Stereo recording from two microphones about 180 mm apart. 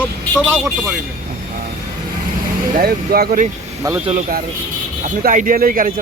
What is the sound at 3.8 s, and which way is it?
Speech, 15° right (ahead or behind).